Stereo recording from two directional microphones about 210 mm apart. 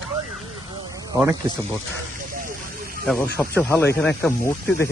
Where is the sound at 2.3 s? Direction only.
45° right (ahead or behind).